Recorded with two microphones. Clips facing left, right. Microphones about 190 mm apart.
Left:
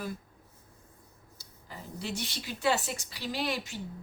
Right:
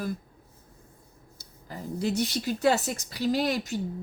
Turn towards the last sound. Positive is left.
turn(degrees=-40)  # may be behind; listen again after turning